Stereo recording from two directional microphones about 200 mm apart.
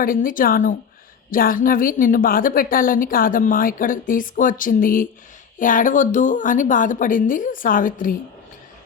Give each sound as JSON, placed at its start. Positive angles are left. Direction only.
{"t": 0.0, "sound": "a woman's voice", "side_deg": 45}